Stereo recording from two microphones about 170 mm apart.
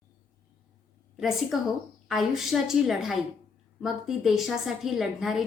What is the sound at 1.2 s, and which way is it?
A woman's voice, centre (ahead or behind).